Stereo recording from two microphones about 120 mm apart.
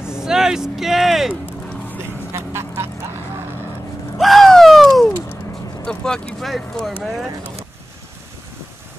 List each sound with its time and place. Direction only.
0.0 s speech: 5° right (ahead or behind)
2.3 s duck: 20° right (ahead or behind)
4.2 s a sound: centre (ahead or behind)
5.9 s speech: 5° left (ahead or behind)